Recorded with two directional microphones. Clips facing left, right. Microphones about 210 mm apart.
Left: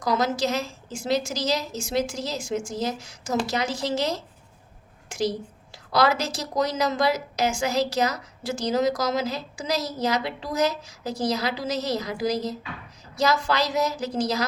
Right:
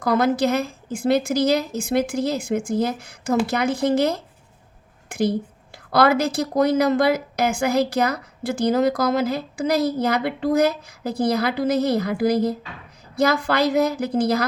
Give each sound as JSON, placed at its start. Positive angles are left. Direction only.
{"t": 0.0, "sound": "a woman's voice", "side_deg": -55}